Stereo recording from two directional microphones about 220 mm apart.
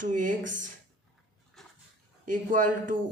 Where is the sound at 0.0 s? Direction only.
35° right (ahead or behind).